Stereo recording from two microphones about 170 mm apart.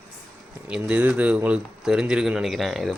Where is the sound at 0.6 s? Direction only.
5° right (ahead or behind).